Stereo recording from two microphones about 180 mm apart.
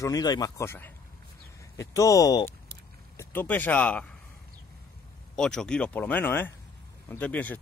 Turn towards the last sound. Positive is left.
turn(degrees=10)  # may be behind; listen again after turning